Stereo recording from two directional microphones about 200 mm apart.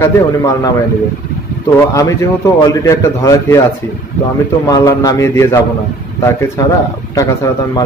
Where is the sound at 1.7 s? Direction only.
15° left (ahead or behind).